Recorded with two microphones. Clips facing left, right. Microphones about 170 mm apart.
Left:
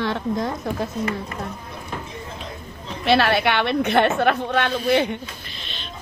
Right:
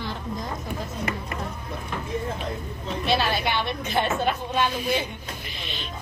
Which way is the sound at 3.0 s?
70° left (ahead or behind).